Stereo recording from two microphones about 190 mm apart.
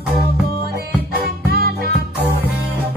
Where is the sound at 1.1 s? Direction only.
55° right (ahead or behind).